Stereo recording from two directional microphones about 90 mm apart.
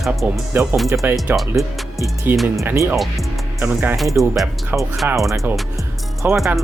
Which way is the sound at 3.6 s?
20° right (ahead or behind).